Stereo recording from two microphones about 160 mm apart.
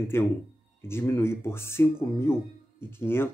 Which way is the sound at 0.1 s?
15° left (ahead or behind).